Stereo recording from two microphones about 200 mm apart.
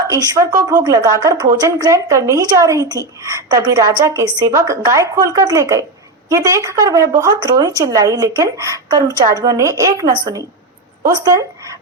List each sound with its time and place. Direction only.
0.1 s speech: 15° right (ahead or behind)